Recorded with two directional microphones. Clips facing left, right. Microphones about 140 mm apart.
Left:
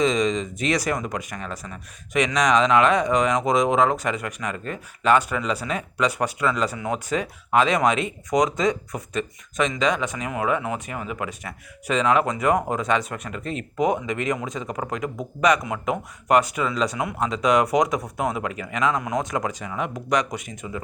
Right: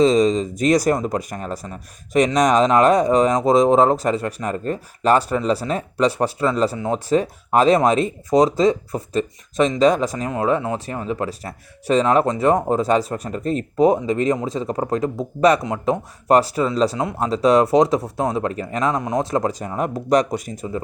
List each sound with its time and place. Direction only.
0.0 s speech: 35° right (ahead or behind)
18.9 s speech: 25° right (ahead or behind)